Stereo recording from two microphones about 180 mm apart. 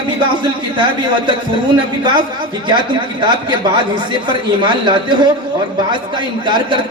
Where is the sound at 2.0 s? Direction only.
25° right (ahead or behind).